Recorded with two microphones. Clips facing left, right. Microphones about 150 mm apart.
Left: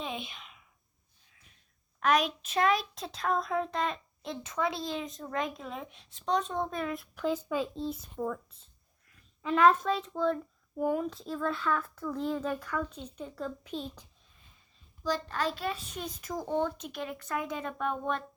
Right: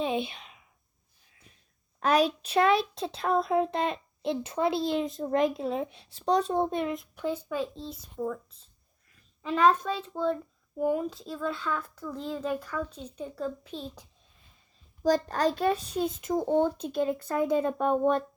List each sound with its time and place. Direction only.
0.0 s a sound: 30° right (ahead or behind)
2.0 s a child's voice: 35° right (ahead or behind)
7.5 s a child's voice: 5° left (ahead or behind)
9.4 s a child's voice: centre (ahead or behind)
11.0 s a child's voice: centre (ahead or behind)
15.0 s a child's voice: 45° right (ahead or behind)
16.0 s a child's voice: 25° right (ahead or behind)